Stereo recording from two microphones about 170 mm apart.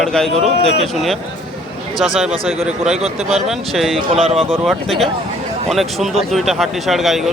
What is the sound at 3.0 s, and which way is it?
Speech, 40° right (ahead or behind).